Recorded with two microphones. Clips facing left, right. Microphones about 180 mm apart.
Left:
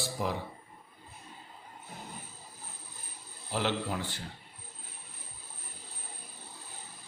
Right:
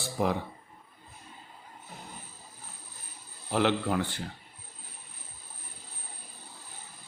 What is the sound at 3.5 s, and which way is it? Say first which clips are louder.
Speech: right 6 dB; 60° right (ahead or behind).